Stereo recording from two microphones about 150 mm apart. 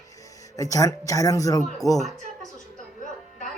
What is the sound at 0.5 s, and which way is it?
A man's voice, 20° left (ahead or behind).